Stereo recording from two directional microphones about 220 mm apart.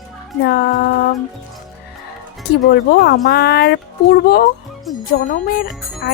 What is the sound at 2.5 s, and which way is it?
Speech, 50° left (ahead or behind).